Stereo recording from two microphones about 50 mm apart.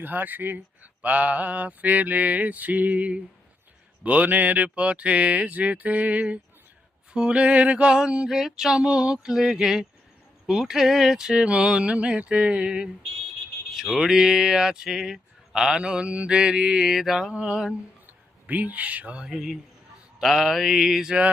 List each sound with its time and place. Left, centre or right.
0.0 s speech: right
1.0 s mantra: right
4.0 s speech: right
8.3 s speech: centre
13.7 s speech: centre
17.3 s speech: centre
18.0 s speech: right
19.3 s speech: centre
20.2 s mantra: centre